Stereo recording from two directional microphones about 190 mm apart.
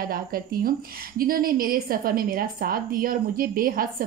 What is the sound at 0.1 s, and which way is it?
A woman's voice, 50° right (ahead or behind).